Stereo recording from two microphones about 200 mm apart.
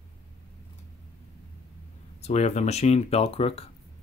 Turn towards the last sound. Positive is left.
turn(degrees=30)  # may be behind; listen again after turning